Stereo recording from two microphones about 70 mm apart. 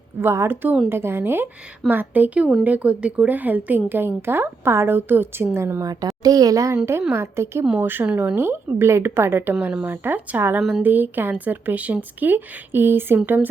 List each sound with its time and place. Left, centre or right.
0.2 s a woman's voice: right
5.8 s a child's voice: right
7.1 s a woman's voice: right
8.4 s a woman's voice: right
10.6 s a woman's voice: centre
10.8 s a woman's voice: right